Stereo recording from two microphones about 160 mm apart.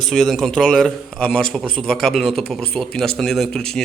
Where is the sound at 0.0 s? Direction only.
Centre (ahead or behind).